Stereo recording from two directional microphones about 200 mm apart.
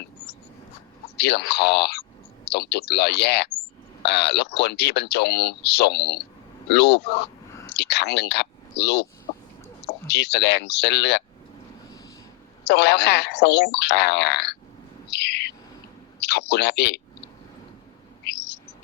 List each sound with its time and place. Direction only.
1.1 s speech: 55° left (ahead or behind)
7.8 s a sound: 55° left (ahead or behind)
10.1 s speech: 55° left (ahead or behind)
12.6 s speech: 55° left (ahead or behind)
15.1 s bird: 55° left (ahead or behind)
16.2 s speech: 55° left (ahead or behind)
18.3 s owl: 55° left (ahead or behind)